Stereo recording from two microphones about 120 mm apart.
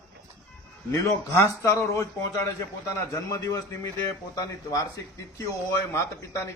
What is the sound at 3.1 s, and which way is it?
A man's voice, 30° left (ahead or behind).